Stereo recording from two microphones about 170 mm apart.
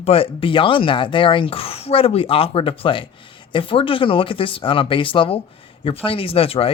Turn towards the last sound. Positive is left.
turn(degrees=35)  # may be behind; listen again after turning